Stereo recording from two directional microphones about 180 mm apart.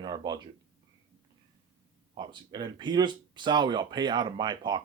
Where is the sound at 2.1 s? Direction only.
25° right (ahead or behind).